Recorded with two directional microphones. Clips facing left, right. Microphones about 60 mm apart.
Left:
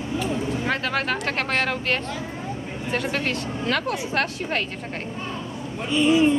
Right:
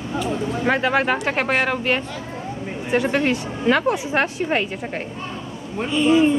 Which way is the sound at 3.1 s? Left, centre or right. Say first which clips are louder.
Right 5 dB; centre.